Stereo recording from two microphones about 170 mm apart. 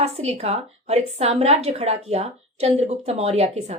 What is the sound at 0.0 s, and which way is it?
A woman's voice, 35° right (ahead or behind).